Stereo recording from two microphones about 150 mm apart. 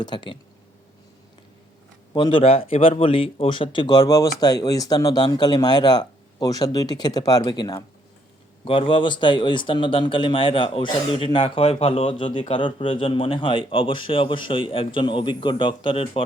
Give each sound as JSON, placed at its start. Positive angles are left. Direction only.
{"t": 0.0, "sound": "speech", "side_deg": 30}
{"t": 2.1, "sound": "speech", "side_deg": 35}